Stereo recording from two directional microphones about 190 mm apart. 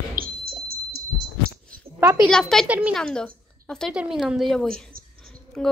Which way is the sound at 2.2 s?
Centre (ahead or behind).